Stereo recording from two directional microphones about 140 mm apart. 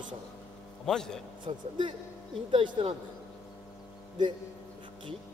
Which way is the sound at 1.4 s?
35° right (ahead or behind).